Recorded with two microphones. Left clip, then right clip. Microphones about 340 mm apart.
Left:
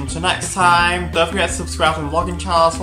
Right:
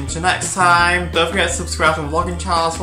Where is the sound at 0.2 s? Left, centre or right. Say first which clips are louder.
Even; centre.